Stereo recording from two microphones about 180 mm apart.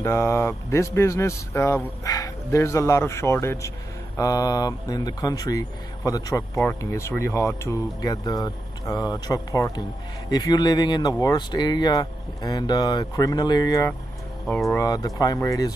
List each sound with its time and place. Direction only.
0.0 s speech: 15° left (ahead or behind)
14.4 s speech: centre (ahead or behind)
14.7 s speech: 20° left (ahead or behind)